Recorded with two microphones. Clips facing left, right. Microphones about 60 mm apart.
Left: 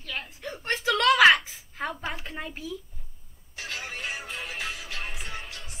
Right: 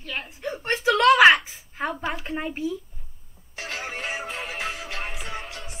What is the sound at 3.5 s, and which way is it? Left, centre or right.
Music, right.